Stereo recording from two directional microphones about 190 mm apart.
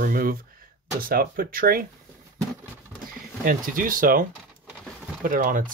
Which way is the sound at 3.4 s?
45° right (ahead or behind).